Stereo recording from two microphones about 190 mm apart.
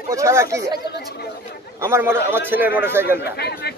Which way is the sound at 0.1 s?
15° right (ahead or behind).